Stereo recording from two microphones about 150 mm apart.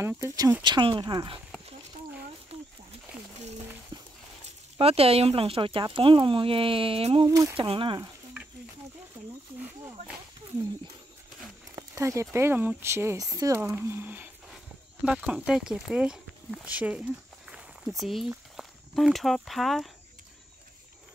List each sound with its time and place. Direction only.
0.0 s speech: 20° right (ahead or behind)
3.9 s horse: 30° right (ahead or behind)
4.7 s speech: 40° right (ahead or behind)
7.2 s speech: 20° right (ahead or behind)
7.5 s speech: 35° right (ahead or behind)
9.6 s snake: 10° right (ahead or behind)
11.7 s speech: 20° right (ahead or behind)
13.6 s speech: 15° right (ahead or behind)